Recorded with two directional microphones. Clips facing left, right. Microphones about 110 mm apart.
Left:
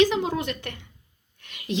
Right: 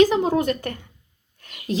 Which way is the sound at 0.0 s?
40° right (ahead or behind).